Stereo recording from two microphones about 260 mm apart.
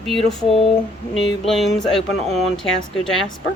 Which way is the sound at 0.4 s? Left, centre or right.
Left.